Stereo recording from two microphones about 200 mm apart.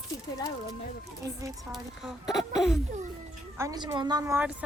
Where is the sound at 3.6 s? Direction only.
15° right (ahead or behind).